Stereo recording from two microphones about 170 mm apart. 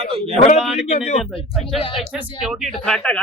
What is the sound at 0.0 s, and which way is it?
Speech, 35° right (ahead or behind).